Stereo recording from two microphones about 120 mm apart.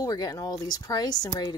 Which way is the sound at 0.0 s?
30° left (ahead or behind).